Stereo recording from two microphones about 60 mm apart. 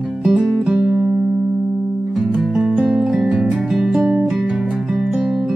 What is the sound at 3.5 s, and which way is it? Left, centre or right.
Music, centre.